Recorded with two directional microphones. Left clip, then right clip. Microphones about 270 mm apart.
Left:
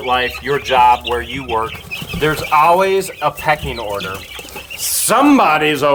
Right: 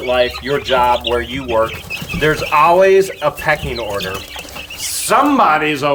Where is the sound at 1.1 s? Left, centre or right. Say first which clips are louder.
Right 2 dB; left.